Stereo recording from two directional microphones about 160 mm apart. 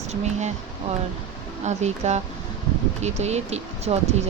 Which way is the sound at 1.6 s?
45° right (ahead or behind).